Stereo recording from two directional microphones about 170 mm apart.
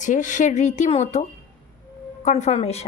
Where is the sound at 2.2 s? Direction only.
40° left (ahead or behind).